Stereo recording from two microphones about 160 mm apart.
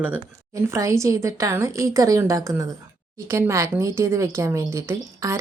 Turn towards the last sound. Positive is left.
turn(degrees=-20)  # may be behind; listen again after turning